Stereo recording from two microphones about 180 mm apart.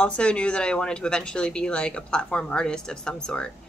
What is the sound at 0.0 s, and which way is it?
Speech, 5° left (ahead or behind).